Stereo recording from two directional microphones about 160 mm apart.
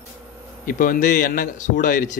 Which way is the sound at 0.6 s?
60° left (ahead or behind).